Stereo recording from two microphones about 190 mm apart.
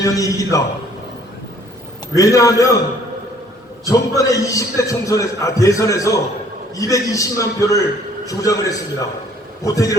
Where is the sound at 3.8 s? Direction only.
15° left (ahead or behind).